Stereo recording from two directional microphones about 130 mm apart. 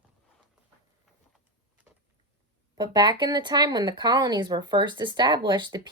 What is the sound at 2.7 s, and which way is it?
Speech, 30° right (ahead or behind).